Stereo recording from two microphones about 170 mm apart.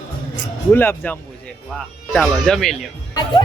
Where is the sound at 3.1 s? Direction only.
25° left (ahead or behind).